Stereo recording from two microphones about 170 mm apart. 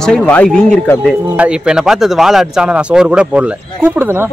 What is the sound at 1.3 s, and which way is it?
Speech, 5° right (ahead or behind).